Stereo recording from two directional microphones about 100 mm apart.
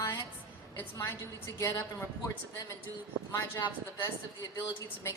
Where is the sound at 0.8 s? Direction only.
30° left (ahead or behind).